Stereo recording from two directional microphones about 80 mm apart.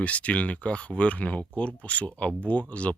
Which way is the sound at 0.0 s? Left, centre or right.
Centre.